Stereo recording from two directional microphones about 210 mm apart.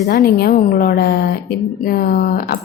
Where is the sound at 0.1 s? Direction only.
45° left (ahead or behind).